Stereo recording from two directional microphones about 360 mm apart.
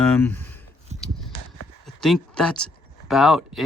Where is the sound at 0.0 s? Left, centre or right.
Centre.